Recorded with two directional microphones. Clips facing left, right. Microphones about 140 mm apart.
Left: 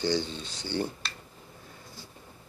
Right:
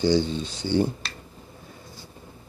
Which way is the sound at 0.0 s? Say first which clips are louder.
Right 7 dB; 15° right (ahead or behind).